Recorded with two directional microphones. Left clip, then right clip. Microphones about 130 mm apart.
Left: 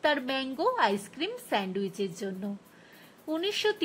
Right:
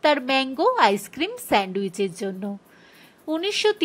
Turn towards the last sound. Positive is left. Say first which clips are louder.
# right 7 dB
turn(degrees=-30)  # may be behind; listen again after turning